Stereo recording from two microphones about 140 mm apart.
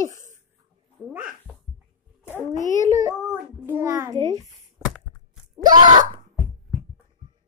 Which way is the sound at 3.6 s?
15° right (ahead or behind).